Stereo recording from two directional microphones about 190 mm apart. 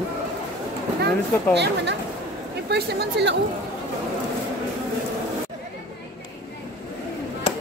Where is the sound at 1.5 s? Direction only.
65° right (ahead or behind).